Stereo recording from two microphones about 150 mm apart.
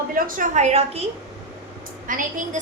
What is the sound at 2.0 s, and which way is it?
Speech, 65° right (ahead or behind).